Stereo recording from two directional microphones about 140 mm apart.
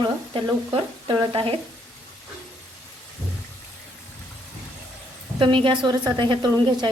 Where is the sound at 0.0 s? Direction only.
35° right (ahead or behind).